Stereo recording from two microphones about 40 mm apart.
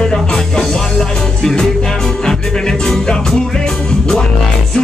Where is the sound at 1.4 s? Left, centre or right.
Centre.